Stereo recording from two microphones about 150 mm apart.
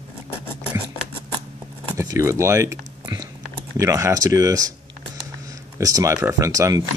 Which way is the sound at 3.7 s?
20° right (ahead or behind).